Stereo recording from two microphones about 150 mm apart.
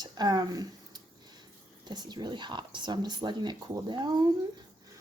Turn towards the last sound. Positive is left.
turn(degrees=-30)  # may be behind; listen again after turning